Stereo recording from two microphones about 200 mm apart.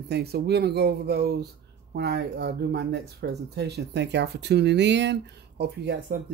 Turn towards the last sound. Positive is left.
turn(degrees=-55)  # may be behind; listen again after turning